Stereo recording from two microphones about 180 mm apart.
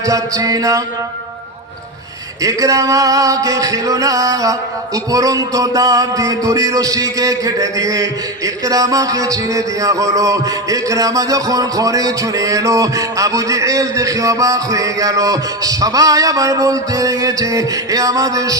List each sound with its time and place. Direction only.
0.0 s music: 20° right (ahead or behind)
2.4 s music: 20° right (ahead or behind)